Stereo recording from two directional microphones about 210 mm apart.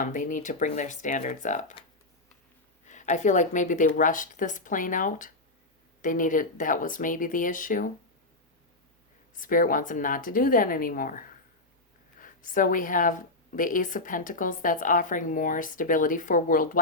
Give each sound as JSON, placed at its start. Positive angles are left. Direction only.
{"t": 0.0, "sound": "a woman's voice", "side_deg": 40}
{"t": 2.8, "sound": "a woman's voice", "side_deg": 35}
{"t": 9.3, "sound": "a woman's voice", "side_deg": 40}